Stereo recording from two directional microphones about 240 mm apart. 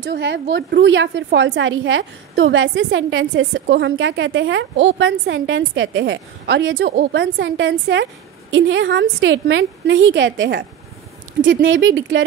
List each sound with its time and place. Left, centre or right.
0.0 s a woman's voice: right